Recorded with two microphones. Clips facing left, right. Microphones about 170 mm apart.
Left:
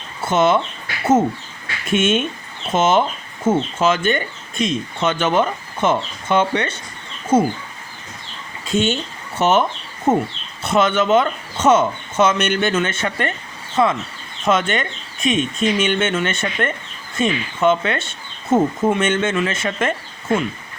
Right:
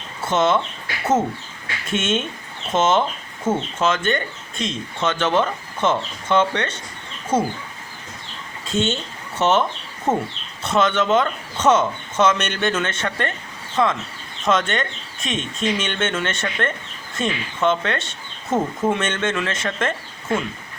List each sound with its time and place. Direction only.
0.3 s speech: 10° left (ahead or behind)
1.9 s speech: 10° left (ahead or behind)
8.6 s speech: 10° left (ahead or behind)